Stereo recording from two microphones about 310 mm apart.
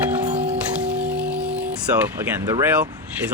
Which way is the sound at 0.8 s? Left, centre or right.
Centre.